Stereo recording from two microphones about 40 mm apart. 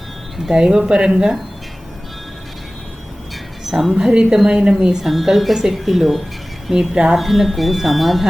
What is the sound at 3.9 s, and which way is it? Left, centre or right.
Speech, centre.